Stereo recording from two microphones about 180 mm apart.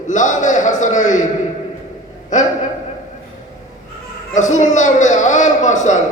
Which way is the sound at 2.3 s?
45° left (ahead or behind).